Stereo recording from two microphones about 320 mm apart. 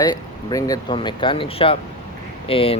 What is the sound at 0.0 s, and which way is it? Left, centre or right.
Speech, centre.